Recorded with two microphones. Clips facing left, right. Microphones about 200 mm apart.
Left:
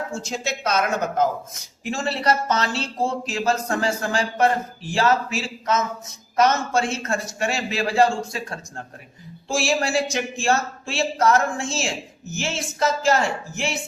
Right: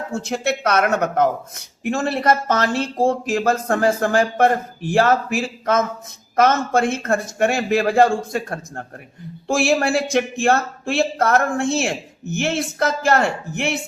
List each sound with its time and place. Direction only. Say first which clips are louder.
0.1 s speech: right 6 dB; 60° right (ahead or behind)